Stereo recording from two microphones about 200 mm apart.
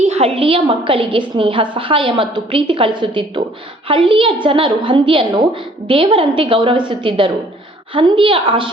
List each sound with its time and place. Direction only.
0.0 s a woman's voice: 35° right (ahead or behind)